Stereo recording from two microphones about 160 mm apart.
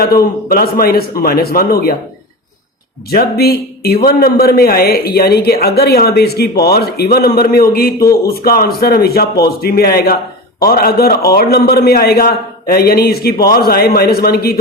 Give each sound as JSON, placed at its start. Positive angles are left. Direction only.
{"t": 0.0, "sound": "a man's voice", "side_deg": 70}
{"t": 3.1, "sound": "a man's voice", "side_deg": 75}
{"t": 10.6, "sound": "a man's voice", "side_deg": 70}